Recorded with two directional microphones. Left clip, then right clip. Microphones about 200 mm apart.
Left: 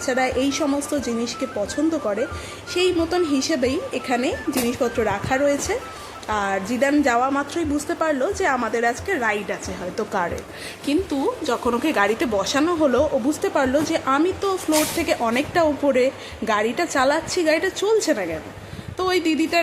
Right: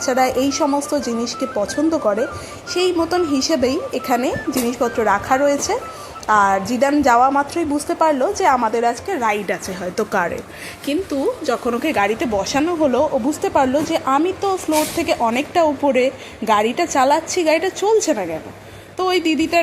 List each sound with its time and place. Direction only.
0.0 s a woman's voice: 10° right (ahead or behind)
9.5 s a woman's voice: 20° right (ahead or behind)